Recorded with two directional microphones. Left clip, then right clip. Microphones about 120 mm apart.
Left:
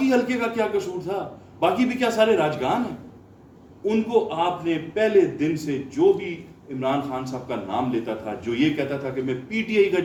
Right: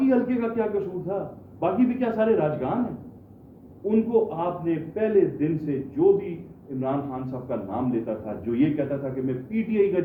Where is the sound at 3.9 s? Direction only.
30° left (ahead or behind).